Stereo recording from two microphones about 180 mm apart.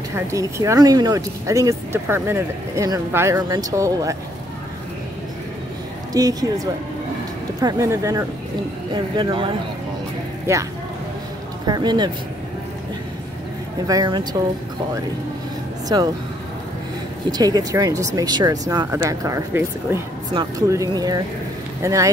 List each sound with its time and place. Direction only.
0.1 s speech: 15° right (ahead or behind)
6.1 s speech: 20° right (ahead or behind)
10.5 s speech: 15° right (ahead or behind)
13.8 s speech: 20° right (ahead or behind)
15.9 s speech: 25° right (ahead or behind)
17.3 s speech: 20° right (ahead or behind)